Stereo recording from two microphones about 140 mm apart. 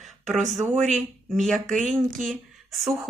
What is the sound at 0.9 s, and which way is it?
Speech, centre (ahead or behind).